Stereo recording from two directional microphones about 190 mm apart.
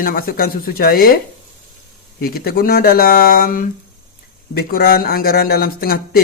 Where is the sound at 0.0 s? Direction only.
50° left (ahead or behind).